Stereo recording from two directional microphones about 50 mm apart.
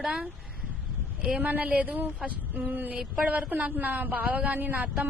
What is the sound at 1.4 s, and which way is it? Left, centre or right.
A man's voice, right.